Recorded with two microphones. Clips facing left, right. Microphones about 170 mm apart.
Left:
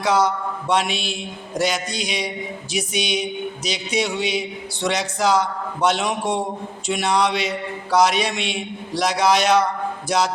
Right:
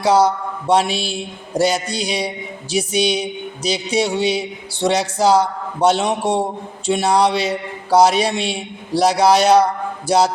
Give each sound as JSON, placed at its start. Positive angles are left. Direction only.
{"t": 0.0, "sound": "a man's voice", "side_deg": -30}